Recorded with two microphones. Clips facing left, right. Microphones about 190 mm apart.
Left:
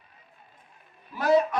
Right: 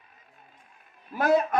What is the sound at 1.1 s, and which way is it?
Speech, 50° right (ahead or behind).